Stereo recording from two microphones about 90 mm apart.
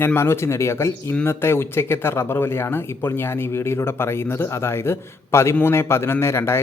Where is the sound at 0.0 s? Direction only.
25° left (ahead or behind).